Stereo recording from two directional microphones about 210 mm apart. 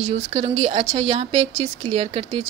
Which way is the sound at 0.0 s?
30° right (ahead or behind).